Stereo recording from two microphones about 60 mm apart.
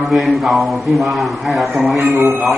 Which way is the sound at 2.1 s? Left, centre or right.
Right.